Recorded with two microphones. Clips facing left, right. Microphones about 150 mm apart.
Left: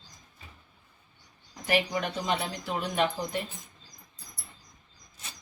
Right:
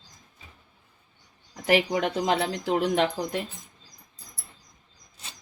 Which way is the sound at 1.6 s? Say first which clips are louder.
Right 5 dB; 80° right.